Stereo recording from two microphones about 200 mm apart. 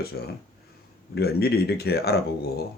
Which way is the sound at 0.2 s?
50° left (ahead or behind).